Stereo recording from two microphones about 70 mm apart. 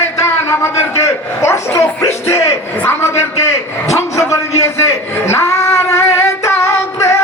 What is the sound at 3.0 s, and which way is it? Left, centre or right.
Speech, left.